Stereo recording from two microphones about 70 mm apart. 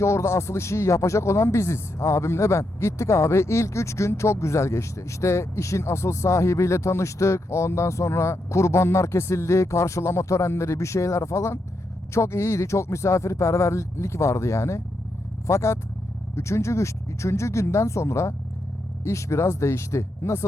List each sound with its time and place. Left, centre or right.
0.0 s speech: left